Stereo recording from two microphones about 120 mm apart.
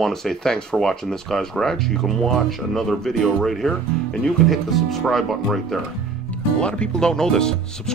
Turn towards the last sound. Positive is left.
turn(degrees=5)  # may be behind; listen again after turning